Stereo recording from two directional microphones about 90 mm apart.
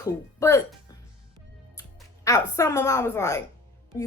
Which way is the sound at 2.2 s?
35° left (ahead or behind).